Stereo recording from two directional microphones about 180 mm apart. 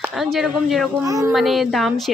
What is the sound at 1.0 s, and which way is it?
Speech, 20° right (ahead or behind).